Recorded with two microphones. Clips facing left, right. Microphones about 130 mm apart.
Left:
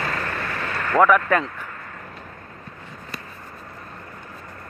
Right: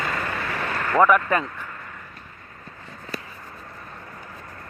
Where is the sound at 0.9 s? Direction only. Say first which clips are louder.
Left 1 dB; 5° right (ahead or behind).